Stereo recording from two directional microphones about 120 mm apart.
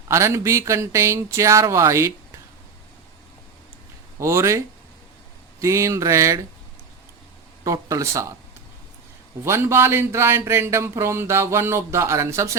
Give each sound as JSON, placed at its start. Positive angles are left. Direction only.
{"t": 0.1, "sound": "speech", "side_deg": -25}
{"t": 4.2, "sound": "speech", "side_deg": -25}
{"t": 7.6, "sound": "speech", "side_deg": -25}
{"t": 9.4, "sound": "speech", "side_deg": -20}